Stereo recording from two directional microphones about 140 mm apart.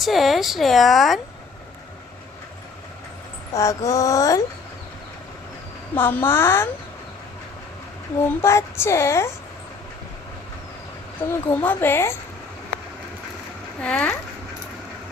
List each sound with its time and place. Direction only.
0.0 s speech: centre (ahead or behind)
3.5 s speech: 25° left (ahead or behind)
5.9 s a woman's voice: 15° left (ahead or behind)
8.4 s speech: 20° left (ahead or behind)
11.3 s a woman's voice: 15° left (ahead or behind)
13.8 s a woman's voice: 10° left (ahead or behind)